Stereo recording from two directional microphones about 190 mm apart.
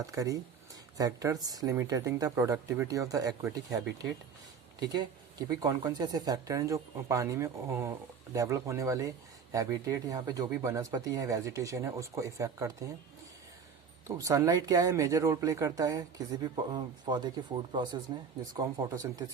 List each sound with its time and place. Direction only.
0.0 s speech: 20° right (ahead or behind)
14.2 s speech: 15° right (ahead or behind)